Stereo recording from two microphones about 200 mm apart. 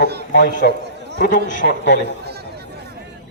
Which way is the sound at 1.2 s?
40° left (ahead or behind).